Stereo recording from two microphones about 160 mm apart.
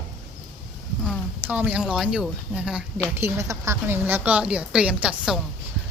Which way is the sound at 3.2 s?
20° right (ahead or behind).